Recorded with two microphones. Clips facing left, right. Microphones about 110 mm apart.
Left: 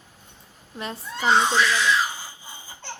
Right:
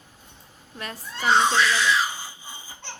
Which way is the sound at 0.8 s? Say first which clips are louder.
Left 3 dB; 25° left (ahead or behind).